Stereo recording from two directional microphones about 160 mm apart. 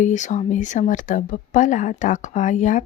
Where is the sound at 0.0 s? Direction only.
50° left (ahead or behind).